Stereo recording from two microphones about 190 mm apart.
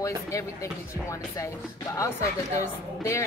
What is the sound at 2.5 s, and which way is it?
Speech, 15° left (ahead or behind).